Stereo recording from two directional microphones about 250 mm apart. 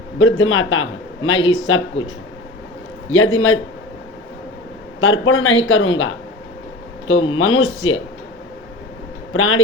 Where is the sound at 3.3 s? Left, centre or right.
Left.